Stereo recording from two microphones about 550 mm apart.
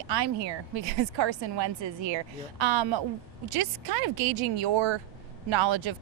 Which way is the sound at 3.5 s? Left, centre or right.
Right.